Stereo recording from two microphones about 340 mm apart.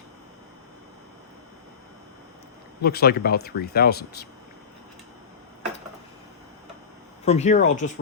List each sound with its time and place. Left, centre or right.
2.8 s speech: left
7.3 s speech: centre